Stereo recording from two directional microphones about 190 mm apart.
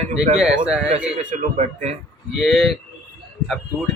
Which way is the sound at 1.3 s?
40° right (ahead or behind).